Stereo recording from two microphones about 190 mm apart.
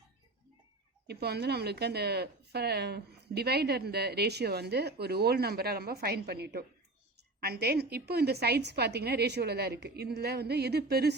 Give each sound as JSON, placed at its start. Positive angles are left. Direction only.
{"t": 1.0, "sound": "speech", "side_deg": -60}